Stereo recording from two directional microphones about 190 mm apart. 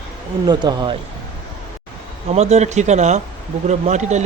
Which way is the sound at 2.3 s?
35° right (ahead or behind).